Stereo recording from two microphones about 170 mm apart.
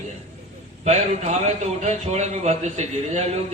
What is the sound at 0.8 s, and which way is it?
A man's voice, 40° right (ahead or behind).